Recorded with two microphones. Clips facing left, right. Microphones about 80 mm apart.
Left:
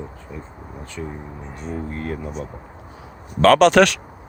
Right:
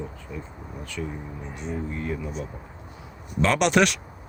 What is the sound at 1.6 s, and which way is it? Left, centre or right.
Speech, left.